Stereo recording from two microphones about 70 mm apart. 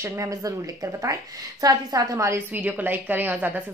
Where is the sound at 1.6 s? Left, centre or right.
Right.